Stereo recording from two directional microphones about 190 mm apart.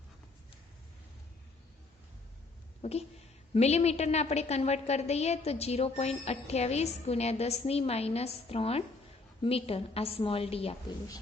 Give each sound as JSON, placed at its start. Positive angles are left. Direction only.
{"t": 2.8, "sound": "a woman's voice", "side_deg": 35}